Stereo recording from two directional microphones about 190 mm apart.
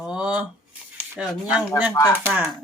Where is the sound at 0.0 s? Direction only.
5° right (ahead or behind).